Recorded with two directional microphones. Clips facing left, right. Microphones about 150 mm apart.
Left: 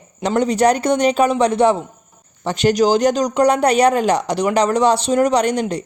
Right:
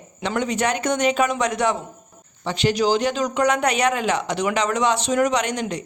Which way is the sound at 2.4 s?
45° left (ahead or behind).